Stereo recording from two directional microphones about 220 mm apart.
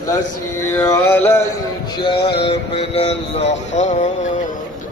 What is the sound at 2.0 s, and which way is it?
Speech, 25° left (ahead or behind).